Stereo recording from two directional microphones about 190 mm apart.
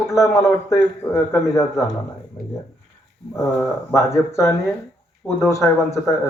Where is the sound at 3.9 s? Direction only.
15° left (ahead or behind).